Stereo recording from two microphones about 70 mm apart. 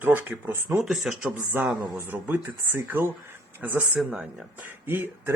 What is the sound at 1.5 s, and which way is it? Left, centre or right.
Speech, right.